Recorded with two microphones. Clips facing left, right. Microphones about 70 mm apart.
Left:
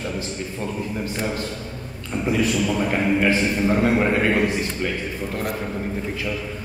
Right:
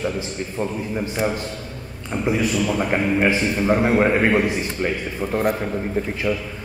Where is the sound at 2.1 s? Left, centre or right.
Right.